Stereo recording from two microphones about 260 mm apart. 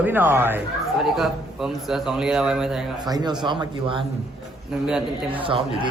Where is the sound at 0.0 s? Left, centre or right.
Centre.